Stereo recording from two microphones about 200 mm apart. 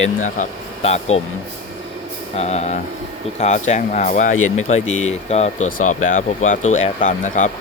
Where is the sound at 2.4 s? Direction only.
35° left (ahead or behind).